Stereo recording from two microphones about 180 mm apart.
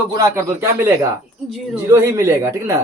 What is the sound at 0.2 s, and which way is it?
Speech, 15° right (ahead or behind).